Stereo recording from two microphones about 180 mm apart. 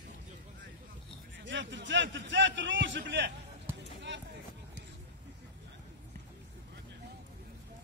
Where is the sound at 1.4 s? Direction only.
90° right.